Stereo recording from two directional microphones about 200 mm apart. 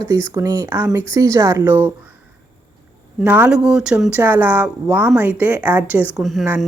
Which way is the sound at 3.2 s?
5° right (ahead or behind).